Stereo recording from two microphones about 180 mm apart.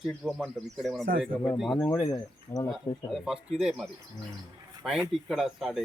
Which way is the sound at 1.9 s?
20° left (ahead or behind).